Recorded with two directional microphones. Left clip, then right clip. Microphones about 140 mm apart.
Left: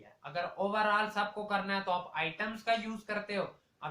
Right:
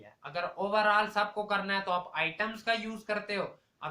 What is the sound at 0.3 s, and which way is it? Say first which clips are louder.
Speech: right 3 dB; 30° right (ahead or behind).